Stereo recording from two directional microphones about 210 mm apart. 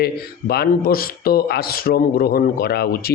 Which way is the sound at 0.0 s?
50° left (ahead or behind).